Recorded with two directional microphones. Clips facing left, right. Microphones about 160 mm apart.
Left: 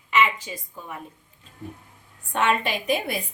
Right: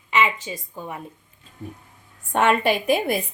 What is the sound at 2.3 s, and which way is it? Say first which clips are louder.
Speech: right 5 dB; 50° right (ahead or behind).